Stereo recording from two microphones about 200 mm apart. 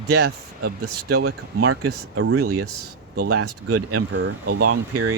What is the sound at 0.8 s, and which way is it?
Speech, 90° right.